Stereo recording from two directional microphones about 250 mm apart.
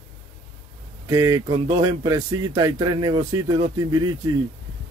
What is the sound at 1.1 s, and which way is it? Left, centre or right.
Speech, centre.